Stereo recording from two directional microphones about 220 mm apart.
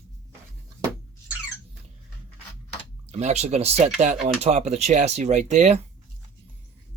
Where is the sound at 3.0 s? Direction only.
30° right (ahead or behind).